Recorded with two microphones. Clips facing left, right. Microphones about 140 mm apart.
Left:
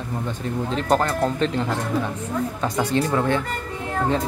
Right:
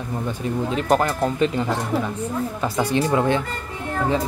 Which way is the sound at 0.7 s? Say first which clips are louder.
Even; 10° right (ahead or behind).